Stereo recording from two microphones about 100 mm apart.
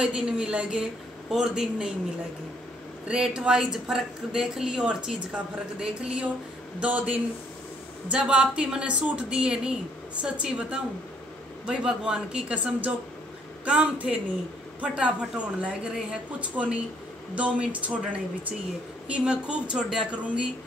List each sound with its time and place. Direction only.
0.0 s speech: 10° right (ahead or behind)
3.1 s speech: 10° right (ahead or behind)